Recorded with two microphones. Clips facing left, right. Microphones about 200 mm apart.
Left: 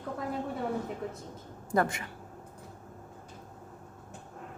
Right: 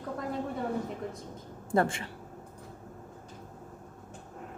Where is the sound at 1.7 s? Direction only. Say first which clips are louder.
Right 1 dB; 30° right (ahead or behind).